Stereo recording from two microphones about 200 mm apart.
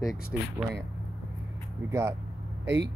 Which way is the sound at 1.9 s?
15° right (ahead or behind).